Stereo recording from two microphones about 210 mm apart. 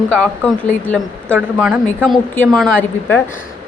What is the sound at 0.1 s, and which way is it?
A woman's voice, 5° left (ahead or behind).